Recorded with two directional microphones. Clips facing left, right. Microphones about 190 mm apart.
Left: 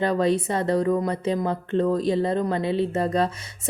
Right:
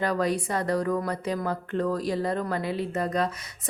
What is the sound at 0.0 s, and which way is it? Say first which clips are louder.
A woman's voice: left 4 dB; 25° left (ahead or behind).